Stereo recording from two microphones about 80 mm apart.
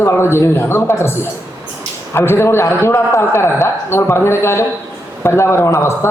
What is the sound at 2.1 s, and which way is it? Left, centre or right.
A man's voice, left.